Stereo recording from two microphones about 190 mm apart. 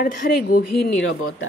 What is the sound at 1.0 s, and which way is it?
Speech, 90° left.